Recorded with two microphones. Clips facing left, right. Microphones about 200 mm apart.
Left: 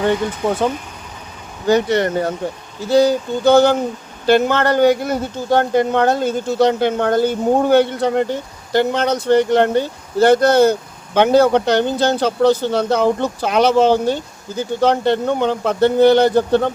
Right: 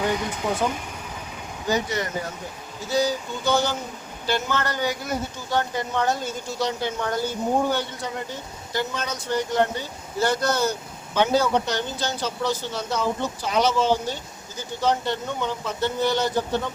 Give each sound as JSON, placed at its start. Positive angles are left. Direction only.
{"t": 1.6, "sound": "speech", "side_deg": 65}